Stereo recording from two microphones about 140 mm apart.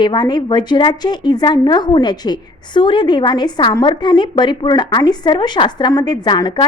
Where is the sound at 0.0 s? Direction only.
30° left (ahead or behind).